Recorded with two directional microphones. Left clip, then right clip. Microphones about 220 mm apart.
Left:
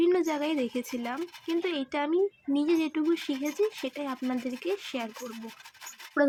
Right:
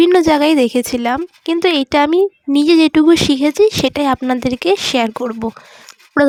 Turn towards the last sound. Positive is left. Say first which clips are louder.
# right 13 dB
turn(degrees=-40)  # may be behind; listen again after turning